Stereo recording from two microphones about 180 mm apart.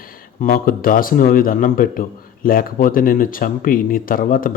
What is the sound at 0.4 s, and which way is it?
Speech, 50° left (ahead or behind).